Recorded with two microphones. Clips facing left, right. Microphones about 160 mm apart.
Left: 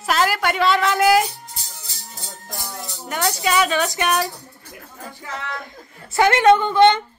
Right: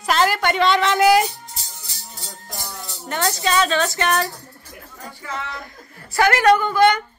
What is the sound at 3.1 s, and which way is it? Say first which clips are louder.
A woman's voice: even; 10° left (ahead or behind).